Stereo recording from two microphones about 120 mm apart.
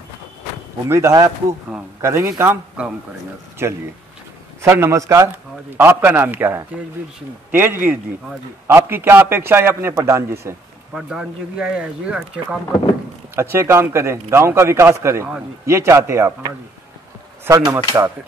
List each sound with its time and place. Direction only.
0.8 s a man's voice: 20° right (ahead or behind)
5.8 s a man's voice: 15° right (ahead or behind)
10.9 s speech: 5° right (ahead or behind)
13.4 s a man's voice: 20° right (ahead or behind)
17.5 s speech: 35° right (ahead or behind)